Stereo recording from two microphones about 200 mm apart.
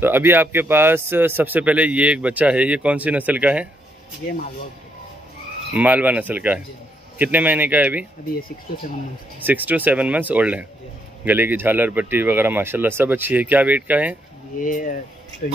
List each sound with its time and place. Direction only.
0.0 s speech: 10° right (ahead or behind)
5.8 s speech: 5° right (ahead or behind)
9.4 s speech: 10° right (ahead or behind)
14.6 s speech: 40° left (ahead or behind)